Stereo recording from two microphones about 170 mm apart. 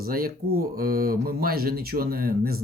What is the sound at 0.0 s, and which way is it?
Speech, 60° right (ahead or behind).